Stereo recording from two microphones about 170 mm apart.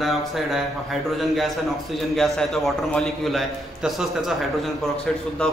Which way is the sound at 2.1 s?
Centre (ahead or behind).